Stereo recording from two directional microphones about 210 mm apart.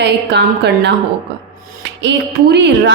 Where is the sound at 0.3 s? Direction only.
55° right (ahead or behind).